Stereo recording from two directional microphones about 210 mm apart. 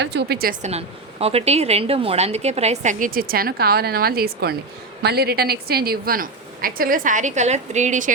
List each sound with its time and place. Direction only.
0.0 s a woman's voice: 55° right (ahead or behind)
0.6 s a woman's voice: 30° right (ahead or behind)